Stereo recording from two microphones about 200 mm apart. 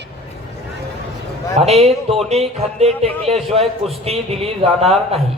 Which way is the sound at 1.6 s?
30° right (ahead or behind).